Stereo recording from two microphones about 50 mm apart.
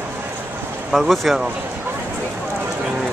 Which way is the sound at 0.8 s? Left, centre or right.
Centre.